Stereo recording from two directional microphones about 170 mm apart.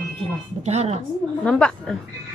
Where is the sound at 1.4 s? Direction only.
5° left (ahead or behind).